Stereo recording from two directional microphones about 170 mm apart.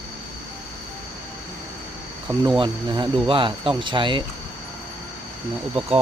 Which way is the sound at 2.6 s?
30° right (ahead or behind).